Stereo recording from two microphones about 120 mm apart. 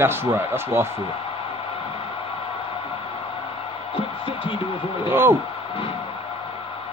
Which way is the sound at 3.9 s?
50° left (ahead or behind).